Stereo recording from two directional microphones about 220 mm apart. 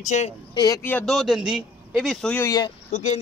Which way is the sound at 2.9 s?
30° left (ahead or behind).